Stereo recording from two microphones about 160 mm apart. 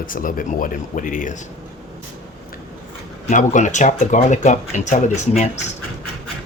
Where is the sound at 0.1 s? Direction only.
60° left (ahead or behind).